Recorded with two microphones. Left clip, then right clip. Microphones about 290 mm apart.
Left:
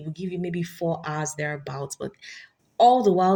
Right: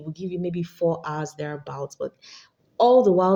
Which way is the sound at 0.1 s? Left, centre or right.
Left.